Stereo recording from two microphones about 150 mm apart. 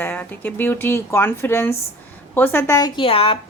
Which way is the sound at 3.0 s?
40° left (ahead or behind).